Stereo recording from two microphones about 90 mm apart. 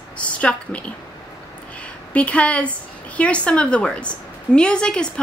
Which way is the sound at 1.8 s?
15° left (ahead or behind).